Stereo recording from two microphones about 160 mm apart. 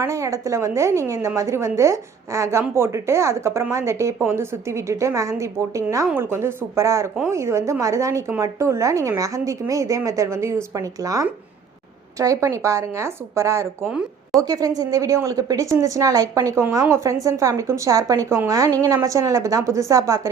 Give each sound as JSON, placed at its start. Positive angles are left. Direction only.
{"t": 0.0, "sound": "a woman's voice", "side_deg": -20}